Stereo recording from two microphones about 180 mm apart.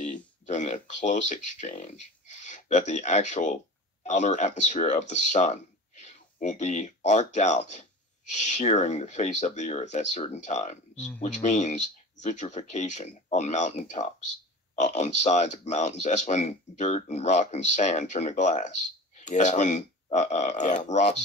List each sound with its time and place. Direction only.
0.5 s speech: 45° left (ahead or behind)